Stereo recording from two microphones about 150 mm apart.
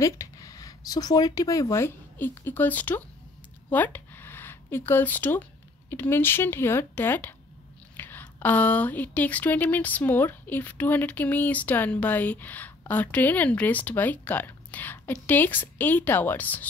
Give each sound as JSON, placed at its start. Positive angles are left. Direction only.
{"t": 0.0, "sound": "a woman's voice", "side_deg": 20}